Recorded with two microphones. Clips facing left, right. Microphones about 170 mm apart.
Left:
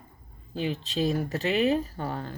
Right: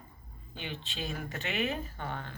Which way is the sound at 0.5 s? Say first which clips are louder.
Left 12 dB; 35° left (ahead or behind).